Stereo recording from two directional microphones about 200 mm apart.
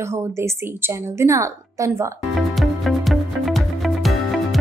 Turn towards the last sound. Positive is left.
turn(degrees=0)  # may be behind; listen again after turning